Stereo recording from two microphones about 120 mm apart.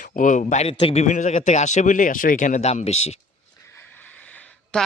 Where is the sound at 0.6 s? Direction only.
60° left (ahead or behind).